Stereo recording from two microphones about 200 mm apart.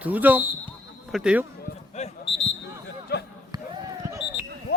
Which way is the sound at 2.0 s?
35° left (ahead or behind).